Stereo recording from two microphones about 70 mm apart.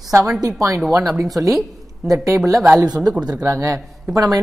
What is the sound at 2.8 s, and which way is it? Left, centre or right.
Speech, right.